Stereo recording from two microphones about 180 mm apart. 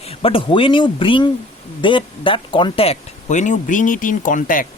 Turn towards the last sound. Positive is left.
turn(degrees=50)  # may be behind; listen again after turning